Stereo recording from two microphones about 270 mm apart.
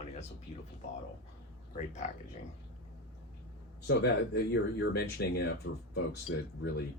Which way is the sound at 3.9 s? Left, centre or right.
Left.